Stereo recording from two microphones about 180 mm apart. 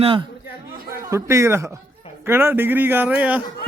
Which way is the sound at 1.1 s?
15° right (ahead or behind).